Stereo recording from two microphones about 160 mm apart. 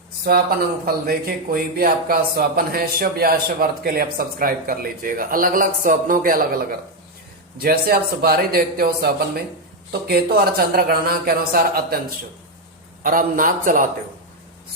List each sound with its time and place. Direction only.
0.3 s a man's voice: 70° right (ahead or behind)
13.0 s speech: 60° right (ahead or behind)